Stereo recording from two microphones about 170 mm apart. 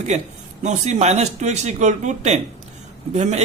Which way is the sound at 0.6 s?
40° right (ahead or behind).